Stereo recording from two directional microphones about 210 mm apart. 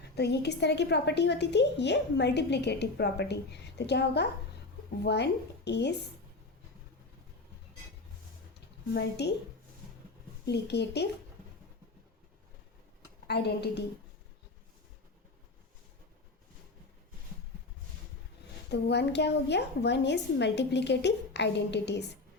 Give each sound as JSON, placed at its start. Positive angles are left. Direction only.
{"t": 0.2, "sound": "a woman's voice", "side_deg": 55}
{"t": 8.9, "sound": "a woman's voice", "side_deg": 50}
{"t": 10.4, "sound": "a woman's voice", "side_deg": 55}
{"t": 13.2, "sound": "a woman's voice", "side_deg": 50}
{"t": 18.7, "sound": "a woman's voice", "side_deg": 55}